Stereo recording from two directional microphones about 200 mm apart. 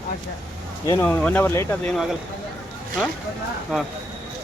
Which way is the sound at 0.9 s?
10° left (ahead or behind).